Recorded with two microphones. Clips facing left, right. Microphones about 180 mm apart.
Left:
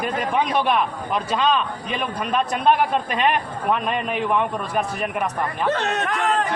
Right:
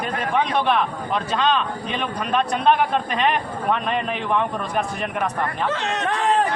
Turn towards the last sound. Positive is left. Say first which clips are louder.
# left 2 dB
turn(degrees=55)  # may be behind; listen again after turning